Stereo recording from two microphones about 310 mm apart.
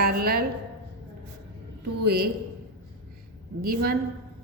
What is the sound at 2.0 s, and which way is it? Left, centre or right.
Speech, right.